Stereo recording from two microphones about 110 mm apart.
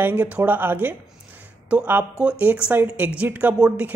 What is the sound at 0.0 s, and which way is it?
Speech, 20° right (ahead or behind).